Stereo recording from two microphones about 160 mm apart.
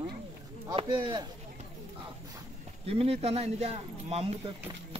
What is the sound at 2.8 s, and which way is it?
Speech, 40° right (ahead or behind).